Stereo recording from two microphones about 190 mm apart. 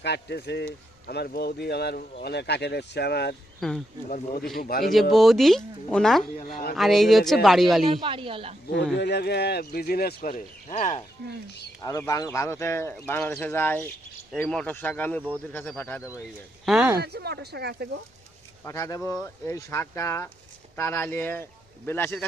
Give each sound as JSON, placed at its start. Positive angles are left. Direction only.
{"t": 0.0, "sound": "speech", "side_deg": 60}
{"t": 3.6, "sound": "speech", "side_deg": 5}
{"t": 4.6, "sound": "speech", "side_deg": 55}
{"t": 5.1, "sound": "speech", "side_deg": 0}
{"t": 6.4, "sound": "speech", "side_deg": 50}
{"t": 6.7, "sound": "speech", "side_deg": 0}
{"t": 8.0, "sound": "speech", "side_deg": -25}
{"t": 8.6, "sound": "speech", "side_deg": 65}
{"t": 11.8, "sound": "speech", "side_deg": 15}
{"t": 16.6, "sound": "speech", "side_deg": -5}
{"t": 17.0, "sound": "speech", "side_deg": -60}
{"t": 18.6, "sound": "speech", "side_deg": 15}